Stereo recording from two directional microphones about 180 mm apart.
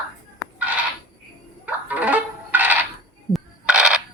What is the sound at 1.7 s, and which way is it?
Music, 10° right (ahead or behind).